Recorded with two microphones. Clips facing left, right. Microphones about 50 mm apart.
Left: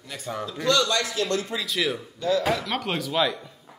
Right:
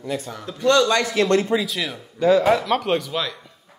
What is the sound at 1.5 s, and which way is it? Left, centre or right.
Speech, centre.